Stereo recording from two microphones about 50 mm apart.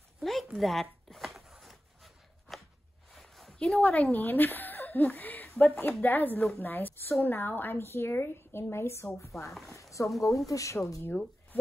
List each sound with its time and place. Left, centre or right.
0.2 s speech: centre
1.0 s a sound: centre
3.5 s a woman's voice: centre
3.8 s a woman's voice: left
9.8 s a sound: left
10.2 s speech: left